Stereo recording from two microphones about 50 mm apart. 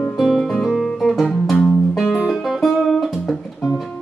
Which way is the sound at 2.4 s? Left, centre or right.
Centre.